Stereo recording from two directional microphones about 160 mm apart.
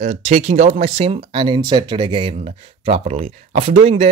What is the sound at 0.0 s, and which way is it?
Speech, 45° right (ahead or behind).